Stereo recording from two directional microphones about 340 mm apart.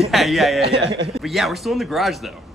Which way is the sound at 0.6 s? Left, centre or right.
Right.